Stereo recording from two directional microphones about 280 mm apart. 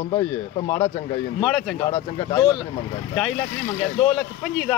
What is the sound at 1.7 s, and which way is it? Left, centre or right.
Speech, centre.